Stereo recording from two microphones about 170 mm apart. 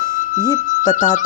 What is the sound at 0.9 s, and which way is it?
Speech, 50° left (ahead or behind).